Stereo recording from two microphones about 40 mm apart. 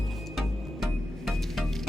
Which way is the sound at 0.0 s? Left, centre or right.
Centre.